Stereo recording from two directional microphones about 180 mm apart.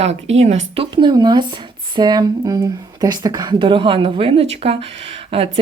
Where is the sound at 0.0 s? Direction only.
35° right (ahead or behind).